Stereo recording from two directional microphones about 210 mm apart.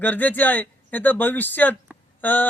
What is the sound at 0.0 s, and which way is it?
A man's voice, 10° left (ahead or behind).